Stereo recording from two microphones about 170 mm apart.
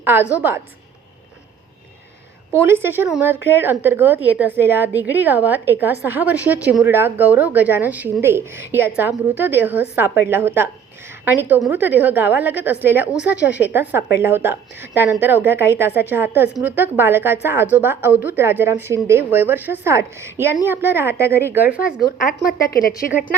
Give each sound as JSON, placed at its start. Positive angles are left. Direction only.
{"t": 0.0, "sound": "a woman's voice", "side_deg": -10}
{"t": 2.6, "sound": "a woman's voice", "side_deg": -15}
{"t": 22.0, "sound": "a woman's voice", "side_deg": 50}